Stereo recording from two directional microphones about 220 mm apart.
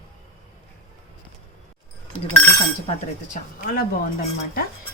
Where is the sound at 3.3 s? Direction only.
40° left (ahead or behind).